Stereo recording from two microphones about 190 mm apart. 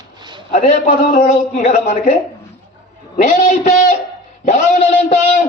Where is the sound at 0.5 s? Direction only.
40° left (ahead or behind).